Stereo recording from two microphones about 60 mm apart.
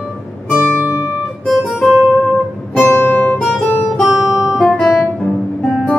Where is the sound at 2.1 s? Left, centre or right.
Centre.